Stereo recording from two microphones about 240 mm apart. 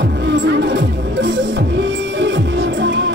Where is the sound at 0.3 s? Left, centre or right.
Right.